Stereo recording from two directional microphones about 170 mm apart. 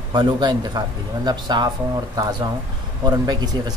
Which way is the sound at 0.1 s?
25° right (ahead or behind).